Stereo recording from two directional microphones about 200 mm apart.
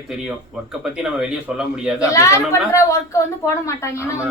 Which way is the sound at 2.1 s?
15° left (ahead or behind).